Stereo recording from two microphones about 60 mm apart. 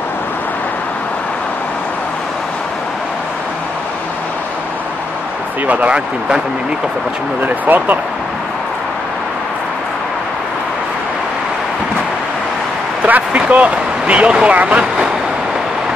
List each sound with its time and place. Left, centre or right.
5.7 s speech: right
7.4 s speech: right
13.0 s speech: right